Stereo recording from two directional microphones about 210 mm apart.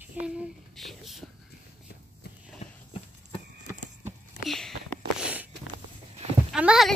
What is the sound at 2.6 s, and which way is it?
Horse, 35° left (ahead or behind).